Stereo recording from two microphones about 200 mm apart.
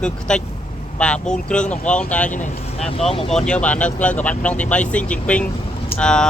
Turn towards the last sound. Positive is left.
turn(degrees=5)  # may be behind; listen again after turning